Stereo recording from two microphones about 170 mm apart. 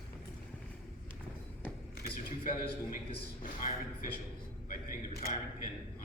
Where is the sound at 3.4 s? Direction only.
55° left (ahead or behind).